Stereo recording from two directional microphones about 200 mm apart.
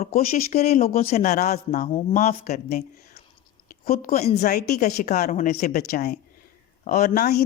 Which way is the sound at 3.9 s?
45° left (ahead or behind).